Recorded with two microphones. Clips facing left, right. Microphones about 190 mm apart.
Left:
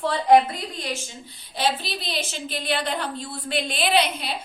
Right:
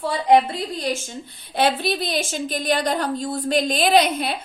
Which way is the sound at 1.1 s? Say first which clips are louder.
Right 7 dB; 55° right (ahead or behind).